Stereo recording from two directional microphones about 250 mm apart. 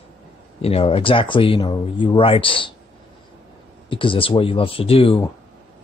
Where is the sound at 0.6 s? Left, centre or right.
Left.